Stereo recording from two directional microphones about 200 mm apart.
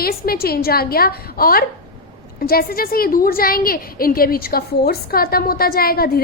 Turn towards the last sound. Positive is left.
turn(degrees=50)  # may be behind; listen again after turning